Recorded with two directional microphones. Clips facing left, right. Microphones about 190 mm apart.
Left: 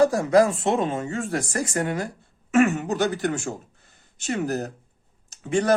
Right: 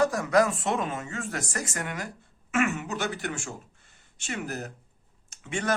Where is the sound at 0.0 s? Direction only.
30° left (ahead or behind).